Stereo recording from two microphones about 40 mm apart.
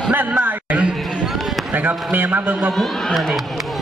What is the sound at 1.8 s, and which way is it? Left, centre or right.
Speech, right.